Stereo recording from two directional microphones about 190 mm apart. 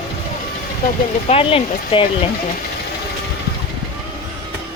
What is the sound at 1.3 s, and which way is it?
Speech, 30° left (ahead or behind).